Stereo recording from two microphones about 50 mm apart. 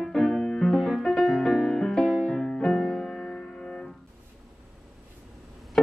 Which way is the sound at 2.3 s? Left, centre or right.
Left.